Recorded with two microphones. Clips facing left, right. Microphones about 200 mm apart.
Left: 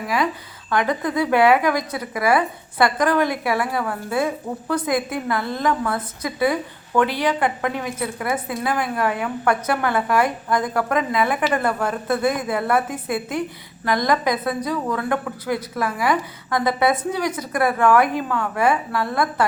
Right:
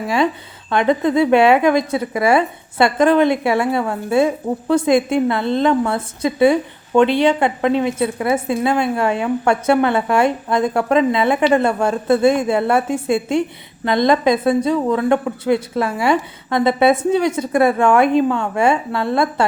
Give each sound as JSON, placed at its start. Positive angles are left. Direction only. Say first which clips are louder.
{"t": 0.7, "sound": "a woman's voice", "louder": "right 6 dB", "side_deg": -25}